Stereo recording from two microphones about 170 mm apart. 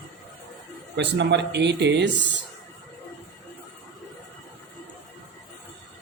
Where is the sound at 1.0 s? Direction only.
90° right.